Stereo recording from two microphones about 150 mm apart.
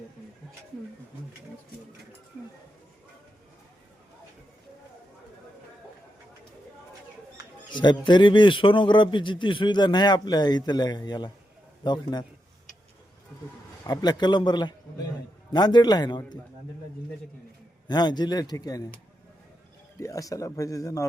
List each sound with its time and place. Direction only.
7.7 s a man's voice: 30° left (ahead or behind)
13.8 s speech: 25° left (ahead or behind)
17.8 s speech: 30° left (ahead or behind)
20.0 s speech: 20° left (ahead or behind)